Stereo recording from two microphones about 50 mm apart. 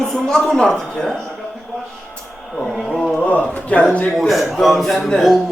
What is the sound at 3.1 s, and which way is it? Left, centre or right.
Speech, left.